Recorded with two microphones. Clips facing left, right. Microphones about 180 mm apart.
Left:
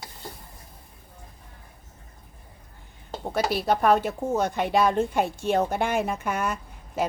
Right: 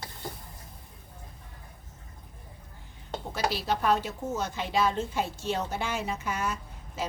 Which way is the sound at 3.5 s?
55° left (ahead or behind).